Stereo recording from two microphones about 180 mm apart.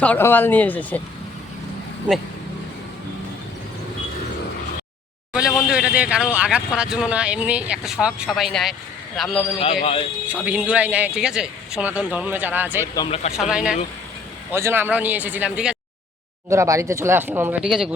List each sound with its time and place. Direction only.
0.0 s speech: 10° left (ahead or behind)
5.3 s speech: 5° right (ahead or behind)
9.8 s speech: 30° left (ahead or behind)
10.4 s speech: 10° right (ahead or behind)
12.8 s speech: 20° left (ahead or behind)
13.1 s speech: 35° left (ahead or behind)
13.5 s speech: 5° right (ahead or behind)
16.5 s speech: 15° right (ahead or behind)